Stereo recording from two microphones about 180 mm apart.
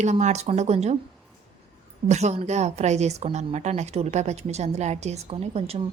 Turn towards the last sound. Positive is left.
turn(degrees=-35)  # may be behind; listen again after turning